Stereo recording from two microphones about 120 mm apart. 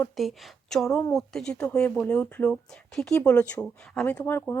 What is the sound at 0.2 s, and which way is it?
Speech, centre (ahead or behind).